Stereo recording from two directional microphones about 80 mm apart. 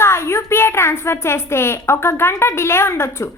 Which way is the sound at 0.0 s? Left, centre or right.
Left.